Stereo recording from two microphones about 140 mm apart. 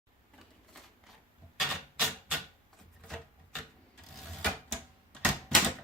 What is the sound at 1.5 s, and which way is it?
Typewriter, 5° right (ahead or behind).